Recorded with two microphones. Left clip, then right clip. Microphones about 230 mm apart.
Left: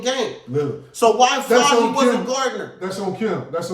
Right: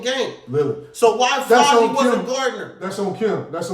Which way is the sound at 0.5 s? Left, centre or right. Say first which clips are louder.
Right 3 dB; centre.